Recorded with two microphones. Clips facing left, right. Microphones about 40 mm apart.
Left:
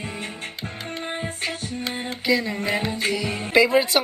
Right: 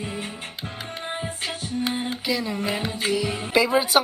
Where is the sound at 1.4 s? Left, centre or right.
Left.